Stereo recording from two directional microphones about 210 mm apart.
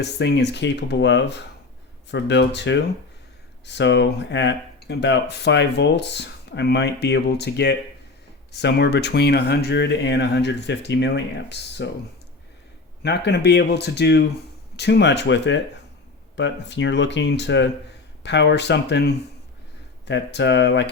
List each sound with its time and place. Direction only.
0.0 s speech: 55° left (ahead or behind)
13.0 s speech: 50° left (ahead or behind)